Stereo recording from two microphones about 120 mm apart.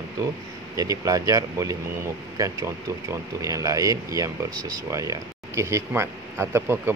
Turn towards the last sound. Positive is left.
turn(degrees=-20)  # may be behind; listen again after turning